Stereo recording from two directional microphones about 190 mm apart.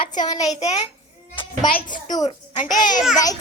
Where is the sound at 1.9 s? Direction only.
20° left (ahead or behind).